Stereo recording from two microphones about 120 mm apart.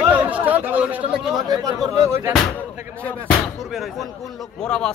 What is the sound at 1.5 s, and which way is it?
Speech, 25° right (ahead or behind).